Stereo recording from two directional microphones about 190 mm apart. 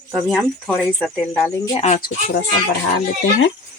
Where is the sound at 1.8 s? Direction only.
35° left (ahead or behind).